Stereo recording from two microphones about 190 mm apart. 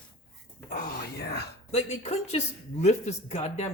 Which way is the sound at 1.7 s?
35° left (ahead or behind).